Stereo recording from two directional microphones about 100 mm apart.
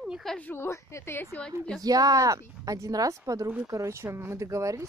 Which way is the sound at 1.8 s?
40° right (ahead or behind).